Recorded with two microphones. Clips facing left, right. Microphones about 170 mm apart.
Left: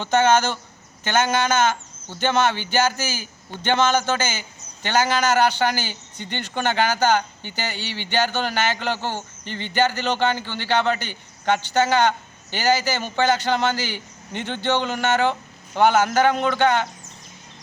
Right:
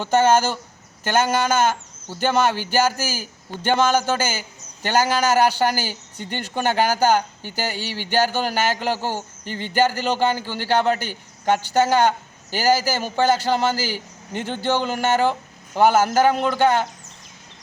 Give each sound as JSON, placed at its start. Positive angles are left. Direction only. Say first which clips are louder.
{"t": 0.0, "sound": "a man's voice", "louder": "right 1 dB", "side_deg": -10}
{"t": 7.8, "sound": "a sound", "louder": "right 2 dB", "side_deg": -40}
{"t": 8.1, "sound": "a man's voice", "louder": "right 2 dB", "side_deg": -10}
{"t": 9.4, "sound": "speech", "louder": "right 2 dB", "side_deg": -40}
{"t": 9.6, "sound": "a man's voice", "louder": "right 2 dB", "side_deg": -10}